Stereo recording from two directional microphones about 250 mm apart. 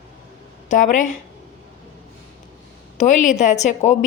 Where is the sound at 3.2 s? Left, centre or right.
Left.